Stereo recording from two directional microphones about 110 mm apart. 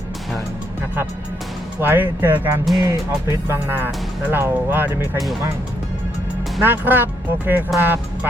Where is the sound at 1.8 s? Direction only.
20° right (ahead or behind).